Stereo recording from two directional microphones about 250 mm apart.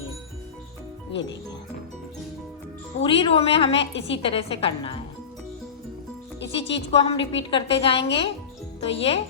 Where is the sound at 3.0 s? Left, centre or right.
Left.